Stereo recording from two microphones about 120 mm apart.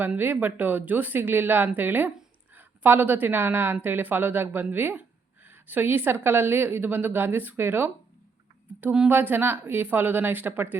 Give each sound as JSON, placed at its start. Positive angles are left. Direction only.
{"t": 0.0, "sound": "speech", "side_deg": -15}